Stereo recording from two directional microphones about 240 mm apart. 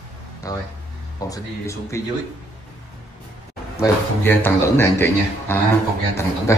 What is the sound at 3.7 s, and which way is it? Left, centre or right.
A man's voice, centre.